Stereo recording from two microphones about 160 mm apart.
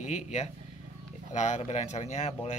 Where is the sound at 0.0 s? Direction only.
50° left (ahead or behind).